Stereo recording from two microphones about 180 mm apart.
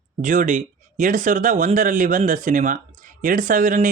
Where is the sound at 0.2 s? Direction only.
45° right (ahead or behind).